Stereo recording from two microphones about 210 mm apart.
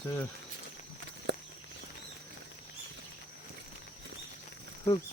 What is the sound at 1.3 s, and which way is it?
Walk, 55° right (ahead or behind).